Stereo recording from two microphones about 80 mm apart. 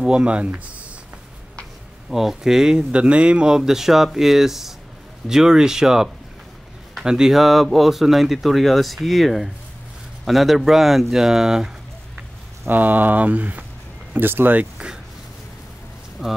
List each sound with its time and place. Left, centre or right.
0.0 s speech: centre
2.0 s speech: centre
12.6 s speech: right
16.2 s speech: centre